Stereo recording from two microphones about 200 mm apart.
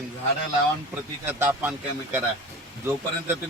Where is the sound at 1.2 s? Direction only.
10° right (ahead or behind).